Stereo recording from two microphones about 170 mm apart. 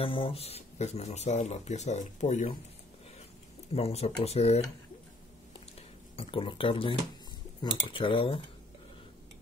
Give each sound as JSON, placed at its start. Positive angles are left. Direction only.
{"t": 0.0, "sound": "speech", "side_deg": 30}
{"t": 3.7, "sound": "speech", "side_deg": 35}
{"t": 5.8, "sound": "speech", "side_deg": 35}